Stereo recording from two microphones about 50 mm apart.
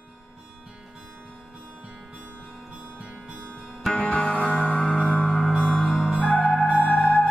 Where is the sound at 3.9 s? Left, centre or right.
Centre.